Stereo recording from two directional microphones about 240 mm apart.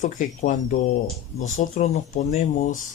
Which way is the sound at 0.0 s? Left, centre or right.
Left.